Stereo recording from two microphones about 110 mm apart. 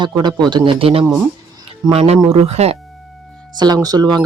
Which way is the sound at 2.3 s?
70° right (ahead or behind).